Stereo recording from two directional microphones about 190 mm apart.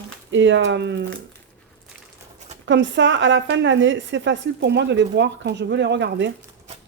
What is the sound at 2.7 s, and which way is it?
A woman's voice, 75° right (ahead or behind).